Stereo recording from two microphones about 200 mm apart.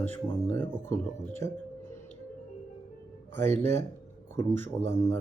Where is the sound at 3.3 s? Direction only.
10° left (ahead or behind).